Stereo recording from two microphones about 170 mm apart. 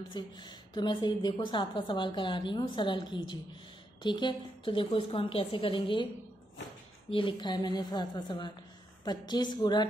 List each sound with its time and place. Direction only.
0.1 s a woman's voice: 25° left (ahead or behind)
7.1 s a woman's voice: 30° left (ahead or behind)